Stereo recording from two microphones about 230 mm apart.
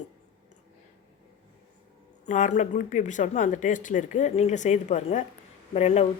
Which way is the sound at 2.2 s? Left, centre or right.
Left.